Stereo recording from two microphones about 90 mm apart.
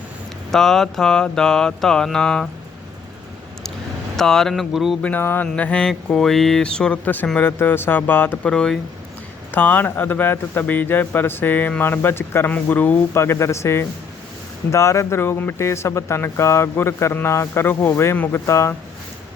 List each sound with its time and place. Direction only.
0.5 s music: 5° left (ahead or behind)
4.2 s speech: 5° left (ahead or behind)
5.0 s music: 20° left (ahead or behind)
7.3 s speech: 20° left (ahead or behind)
8.4 s music: 10° left (ahead or behind)
9.5 s speech: 20° left (ahead or behind)
13.1 s speech: 30° left (ahead or behind)